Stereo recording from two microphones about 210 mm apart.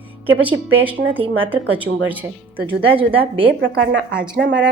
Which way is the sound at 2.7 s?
25° right (ahead or behind).